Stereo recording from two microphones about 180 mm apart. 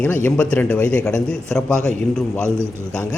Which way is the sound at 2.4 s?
15° right (ahead or behind).